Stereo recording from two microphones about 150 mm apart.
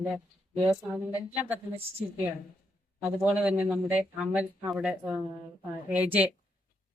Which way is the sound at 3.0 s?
5° right (ahead or behind).